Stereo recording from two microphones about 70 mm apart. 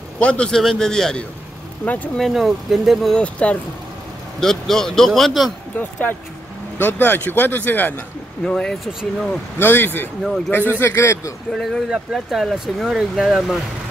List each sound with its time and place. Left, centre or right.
0.2 s a man's voice: centre
3.2 s a man's voice: centre
4.4 s speech: centre
5.8 s speech: left
8.5 s a man's voice: centre
9.6 s a man's voice: left
11.5 s speech: centre